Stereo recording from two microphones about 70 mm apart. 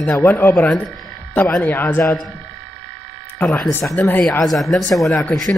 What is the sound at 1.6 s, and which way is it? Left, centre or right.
Speech, left.